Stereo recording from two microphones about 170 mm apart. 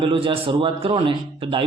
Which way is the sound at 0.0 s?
30° right (ahead or behind).